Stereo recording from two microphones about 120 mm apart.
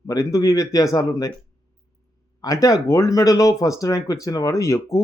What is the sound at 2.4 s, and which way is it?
Speech, 25° left (ahead or behind).